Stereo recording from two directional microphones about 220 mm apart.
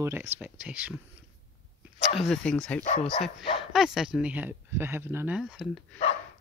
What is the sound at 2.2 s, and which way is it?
Speech, centre (ahead or behind).